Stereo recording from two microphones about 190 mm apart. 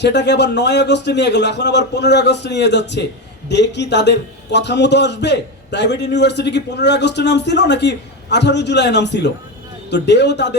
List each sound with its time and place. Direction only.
0.0 s a man's voice: 65° left (ahead or behind)